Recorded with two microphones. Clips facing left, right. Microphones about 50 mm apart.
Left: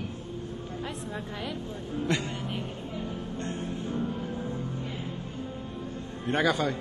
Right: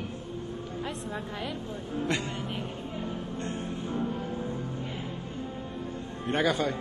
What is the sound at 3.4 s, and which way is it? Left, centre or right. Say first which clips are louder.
Music: left 2 dB; right.